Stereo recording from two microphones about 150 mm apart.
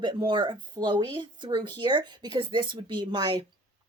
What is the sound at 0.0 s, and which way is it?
A woman's voice, 30° right (ahead or behind).